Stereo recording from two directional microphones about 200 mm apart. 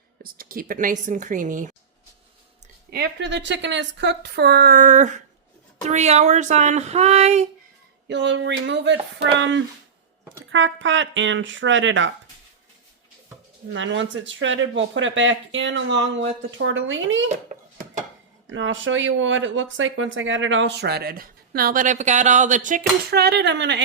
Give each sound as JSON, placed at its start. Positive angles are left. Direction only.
{"t": 0.2, "sound": "speech", "side_deg": -45}
{"t": 2.9, "sound": "speech", "side_deg": -60}
{"t": 8.0, "sound": "speech", "side_deg": -60}
{"t": 13.7, "sound": "speech", "side_deg": -70}
{"t": 17.2, "sound": "dishes", "side_deg": -35}
{"t": 18.4, "sound": "speech", "side_deg": -70}